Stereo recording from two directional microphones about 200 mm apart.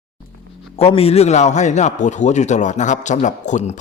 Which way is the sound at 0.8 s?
30° left (ahead or behind).